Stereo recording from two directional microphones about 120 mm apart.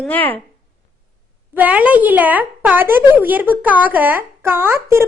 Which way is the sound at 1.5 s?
10° right (ahead or behind).